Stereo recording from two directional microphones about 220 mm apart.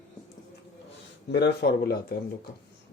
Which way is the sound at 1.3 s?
50° left (ahead or behind).